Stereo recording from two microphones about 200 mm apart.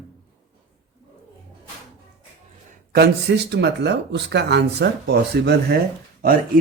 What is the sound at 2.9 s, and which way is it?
Speech, 55° right (ahead or behind).